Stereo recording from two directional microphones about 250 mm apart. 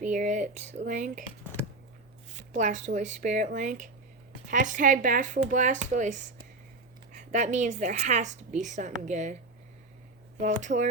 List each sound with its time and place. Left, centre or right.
0.0 s a woman's voice: right
2.5 s a woman's voice: right
10.4 s a woman's voice: right